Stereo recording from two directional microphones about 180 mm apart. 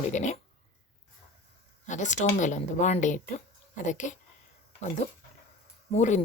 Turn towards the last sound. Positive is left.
turn(degrees=40)  # may be behind; listen again after turning